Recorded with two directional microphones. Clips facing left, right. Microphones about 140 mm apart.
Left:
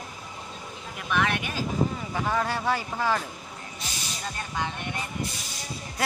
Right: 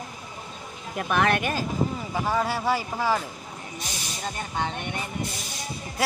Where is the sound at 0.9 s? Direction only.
45° right (ahead or behind).